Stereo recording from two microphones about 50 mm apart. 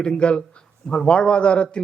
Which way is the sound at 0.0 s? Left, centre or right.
Centre.